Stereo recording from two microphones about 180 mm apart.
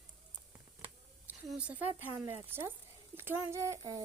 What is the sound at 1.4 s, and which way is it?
A woman's voice, 5° right (ahead or behind).